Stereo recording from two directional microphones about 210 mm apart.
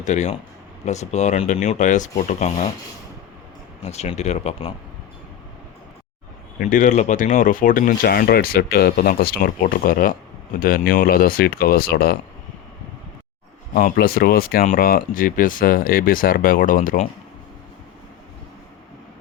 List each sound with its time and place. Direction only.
0.0 s speech: 35° left (ahead or behind)
3.8 s speech: 30° left (ahead or behind)
6.6 s speech: 40° left (ahead or behind)
13.7 s speech: 40° left (ahead or behind)